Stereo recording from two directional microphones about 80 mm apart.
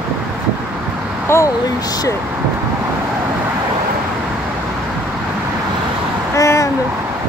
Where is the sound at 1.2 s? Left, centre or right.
Left.